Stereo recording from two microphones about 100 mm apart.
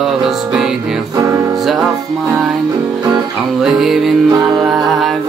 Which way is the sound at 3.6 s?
5° right (ahead or behind).